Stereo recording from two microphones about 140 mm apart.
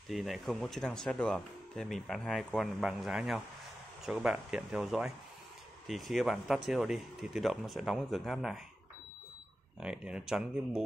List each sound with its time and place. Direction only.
0.1 s speech: centre (ahead or behind)
9.8 s speech: 5° right (ahead or behind)